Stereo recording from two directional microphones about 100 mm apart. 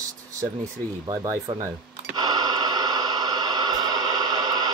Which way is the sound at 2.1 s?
45° right (ahead or behind).